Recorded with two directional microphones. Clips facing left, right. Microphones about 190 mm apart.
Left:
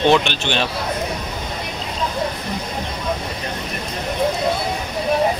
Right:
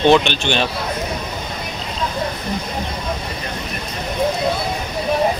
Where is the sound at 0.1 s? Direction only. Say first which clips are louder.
Right 3 dB; 5° left (ahead or behind).